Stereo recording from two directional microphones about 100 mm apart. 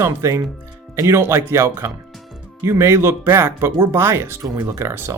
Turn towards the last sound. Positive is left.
turn(degrees=-25)  # may be behind; listen again after turning